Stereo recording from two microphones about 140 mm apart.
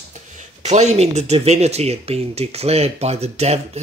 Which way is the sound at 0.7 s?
55° right (ahead or behind).